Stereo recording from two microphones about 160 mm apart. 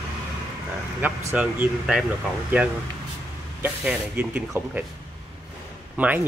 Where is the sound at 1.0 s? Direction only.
10° right (ahead or behind).